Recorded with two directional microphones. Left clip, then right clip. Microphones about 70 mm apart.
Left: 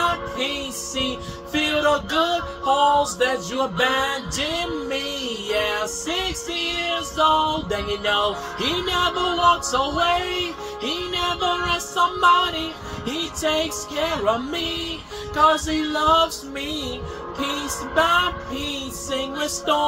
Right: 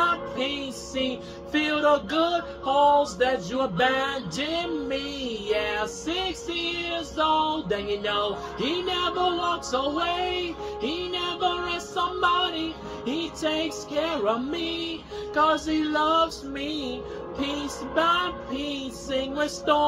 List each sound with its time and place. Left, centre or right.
1.5 s music: left
5.5 s music: left
15.3 s music: left
17.4 s music: left